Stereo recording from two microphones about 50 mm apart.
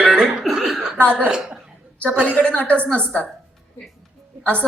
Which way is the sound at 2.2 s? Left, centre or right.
Left.